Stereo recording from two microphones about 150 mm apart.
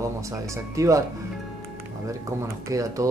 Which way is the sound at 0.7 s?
20° right (ahead or behind).